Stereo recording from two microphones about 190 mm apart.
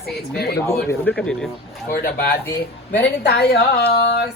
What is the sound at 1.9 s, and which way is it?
Speech, 50° left (ahead or behind).